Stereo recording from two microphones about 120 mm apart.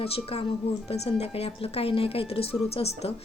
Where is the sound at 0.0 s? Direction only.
55° left (ahead or behind).